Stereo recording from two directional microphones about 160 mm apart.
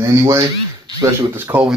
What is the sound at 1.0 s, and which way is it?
Speech, 20° right (ahead or behind).